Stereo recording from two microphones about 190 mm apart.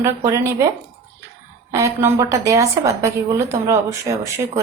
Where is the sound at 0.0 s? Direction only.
15° right (ahead or behind).